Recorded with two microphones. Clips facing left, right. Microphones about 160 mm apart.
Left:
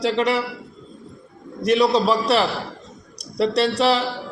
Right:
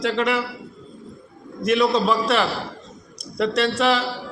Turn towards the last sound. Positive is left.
turn(degrees=35)  # may be behind; listen again after turning